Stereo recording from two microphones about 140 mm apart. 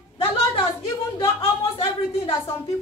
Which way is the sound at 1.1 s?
40° left (ahead or behind).